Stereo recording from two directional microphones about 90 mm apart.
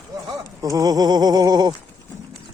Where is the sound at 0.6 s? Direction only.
40° right (ahead or behind).